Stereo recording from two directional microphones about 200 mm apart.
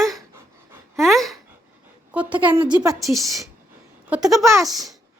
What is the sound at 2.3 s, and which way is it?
Speech, 25° right (ahead or behind).